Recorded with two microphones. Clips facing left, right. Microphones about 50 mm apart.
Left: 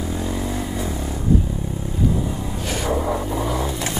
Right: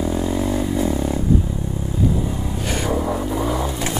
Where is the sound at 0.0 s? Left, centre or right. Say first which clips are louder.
Right 4 dB; centre.